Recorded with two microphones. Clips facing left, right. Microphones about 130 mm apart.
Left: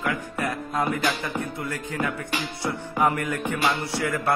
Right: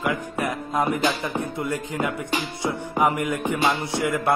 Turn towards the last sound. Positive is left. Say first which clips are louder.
# right 2 dB
turn(degrees=-20)  # may be behind; listen again after turning